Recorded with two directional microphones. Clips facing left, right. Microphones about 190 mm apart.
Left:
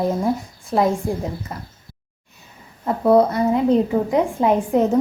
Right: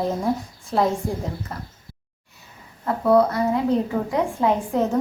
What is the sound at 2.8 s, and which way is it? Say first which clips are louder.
A woman's voice: left 2 dB; 20° left (ahead or behind).